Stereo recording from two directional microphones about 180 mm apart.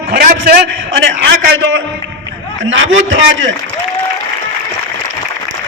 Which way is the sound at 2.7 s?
90° right.